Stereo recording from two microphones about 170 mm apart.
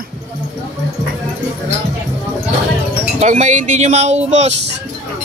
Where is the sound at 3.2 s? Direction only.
45° right (ahead or behind).